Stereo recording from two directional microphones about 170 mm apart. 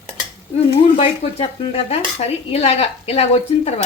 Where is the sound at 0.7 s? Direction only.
35° left (ahead or behind).